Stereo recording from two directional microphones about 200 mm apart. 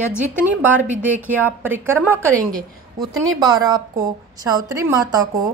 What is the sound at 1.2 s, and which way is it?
A woman's voice, 10° right (ahead or behind).